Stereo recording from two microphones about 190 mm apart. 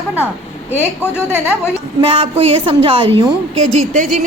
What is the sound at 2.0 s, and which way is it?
A woman's voice, 30° right (ahead or behind).